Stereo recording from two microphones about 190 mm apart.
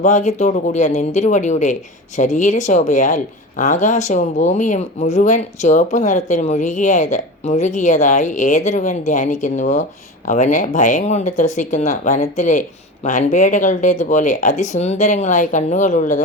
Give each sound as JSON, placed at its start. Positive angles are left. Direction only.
{"t": 0.0, "sound": "speech", "side_deg": 40}